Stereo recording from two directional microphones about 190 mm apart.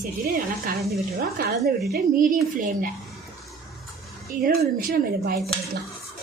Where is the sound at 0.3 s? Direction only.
45° right (ahead or behind).